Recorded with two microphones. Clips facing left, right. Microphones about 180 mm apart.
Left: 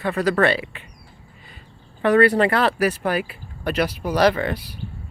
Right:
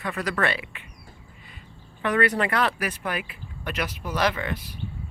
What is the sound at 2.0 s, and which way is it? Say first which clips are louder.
Speech: left 8 dB; 35° left (ahead or behind).